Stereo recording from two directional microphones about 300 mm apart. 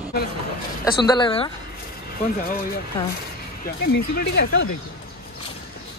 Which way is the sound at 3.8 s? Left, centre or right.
Left.